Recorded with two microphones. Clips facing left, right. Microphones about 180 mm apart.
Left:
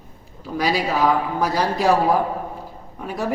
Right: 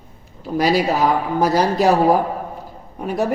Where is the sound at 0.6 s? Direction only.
40° right (ahead or behind).